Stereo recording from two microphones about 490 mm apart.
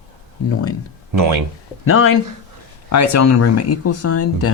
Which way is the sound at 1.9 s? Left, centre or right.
Left.